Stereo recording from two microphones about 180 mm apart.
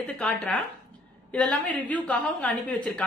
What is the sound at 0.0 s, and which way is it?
A woman's voice, 10° left (ahead or behind).